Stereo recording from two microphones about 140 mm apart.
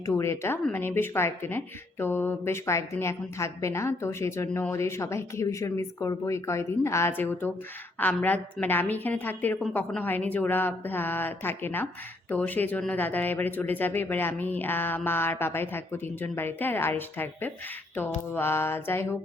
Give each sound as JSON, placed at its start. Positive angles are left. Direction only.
{"t": 0.1, "sound": "a woman's voice", "side_deg": 20}